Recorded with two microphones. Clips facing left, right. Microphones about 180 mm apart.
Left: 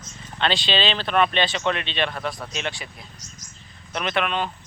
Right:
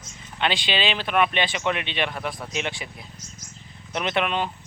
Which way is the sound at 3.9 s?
20° right (ahead or behind).